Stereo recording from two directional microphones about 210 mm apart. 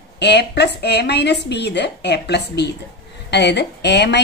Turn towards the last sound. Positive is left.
turn(degrees=55)  # may be behind; listen again after turning